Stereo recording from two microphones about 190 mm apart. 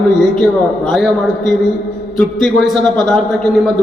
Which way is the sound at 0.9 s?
Centre (ahead or behind).